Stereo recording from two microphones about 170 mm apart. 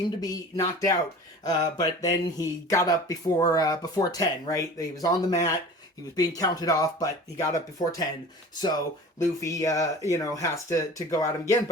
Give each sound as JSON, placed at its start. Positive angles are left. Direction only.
{"t": 0.2, "sound": "speech", "side_deg": 20}